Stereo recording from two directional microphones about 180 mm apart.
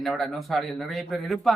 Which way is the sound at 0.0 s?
Centre (ahead or behind).